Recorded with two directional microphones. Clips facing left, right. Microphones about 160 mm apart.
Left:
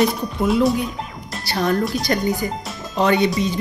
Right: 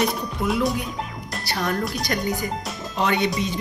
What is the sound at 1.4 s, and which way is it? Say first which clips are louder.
Speech: left 5 dB; 30° left (ahead or behind).